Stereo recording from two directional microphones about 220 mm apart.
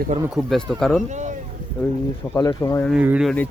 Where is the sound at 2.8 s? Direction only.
5° right (ahead or behind).